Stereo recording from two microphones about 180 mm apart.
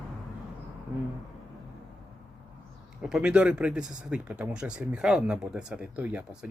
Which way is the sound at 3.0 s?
5° right (ahead or behind).